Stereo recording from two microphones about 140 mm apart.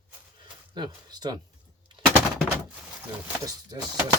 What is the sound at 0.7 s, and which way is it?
Speech, 30° right (ahead or behind).